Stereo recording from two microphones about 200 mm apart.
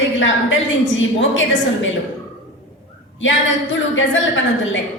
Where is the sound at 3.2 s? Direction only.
70° left (ahead or behind).